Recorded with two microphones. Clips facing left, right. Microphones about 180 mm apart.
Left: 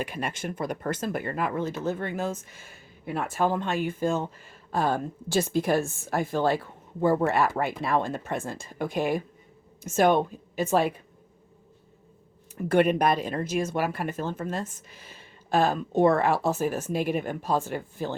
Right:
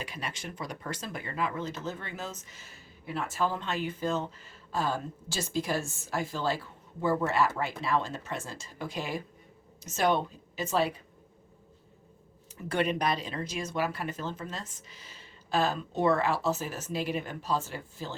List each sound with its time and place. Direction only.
0.0 s a woman's voice: 55° left (ahead or behind)
12.5 s speech: 55° left (ahead or behind)